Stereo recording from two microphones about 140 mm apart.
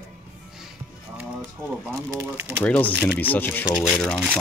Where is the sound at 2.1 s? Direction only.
15° right (ahead or behind).